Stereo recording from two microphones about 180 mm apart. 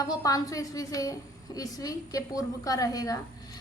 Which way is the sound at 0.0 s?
20° left (ahead or behind).